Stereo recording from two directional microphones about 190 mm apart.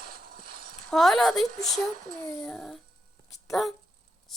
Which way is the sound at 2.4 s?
Centre (ahead or behind).